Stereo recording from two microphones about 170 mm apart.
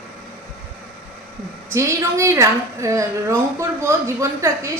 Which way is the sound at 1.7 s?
15° right (ahead or behind).